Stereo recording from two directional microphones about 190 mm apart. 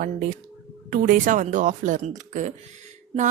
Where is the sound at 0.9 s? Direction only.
45° right (ahead or behind).